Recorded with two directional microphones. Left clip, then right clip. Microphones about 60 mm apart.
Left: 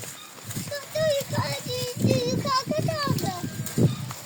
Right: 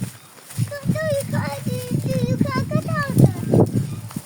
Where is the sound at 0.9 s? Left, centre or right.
Centre.